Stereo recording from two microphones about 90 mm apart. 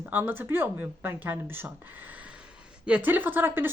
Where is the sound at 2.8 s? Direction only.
15° right (ahead or behind).